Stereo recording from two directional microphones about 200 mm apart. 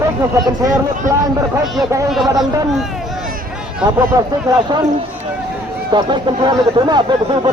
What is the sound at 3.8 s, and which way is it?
Speech, 20° right (ahead or behind).